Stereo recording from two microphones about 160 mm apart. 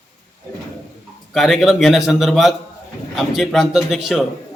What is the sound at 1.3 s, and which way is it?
A man's voice, centre (ahead or behind).